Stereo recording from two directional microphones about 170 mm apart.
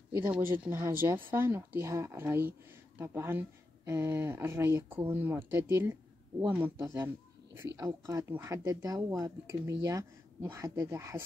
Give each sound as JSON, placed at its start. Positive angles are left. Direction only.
{"t": 0.3, "sound": "speech", "side_deg": -10}
{"t": 6.4, "sound": "speech", "side_deg": -10}